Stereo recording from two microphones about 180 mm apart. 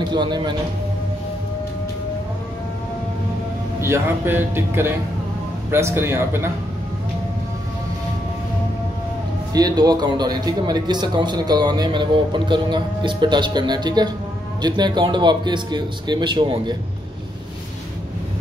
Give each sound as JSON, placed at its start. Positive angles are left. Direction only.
{"t": 0.1, "sound": "speech", "side_deg": -25}
{"t": 3.8, "sound": "speech", "side_deg": -15}
{"t": 9.5, "sound": "speech", "side_deg": -20}